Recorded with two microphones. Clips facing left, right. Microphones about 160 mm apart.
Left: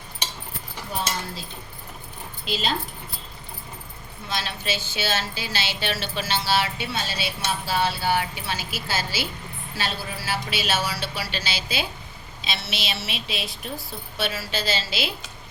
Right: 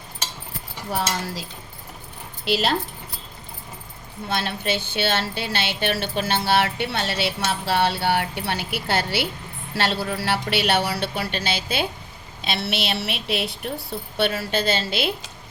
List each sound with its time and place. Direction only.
0.9 s speech: 90° right
2.4 s speech: 70° right (ahead or behind)
4.3 s a woman's voice: 55° right (ahead or behind)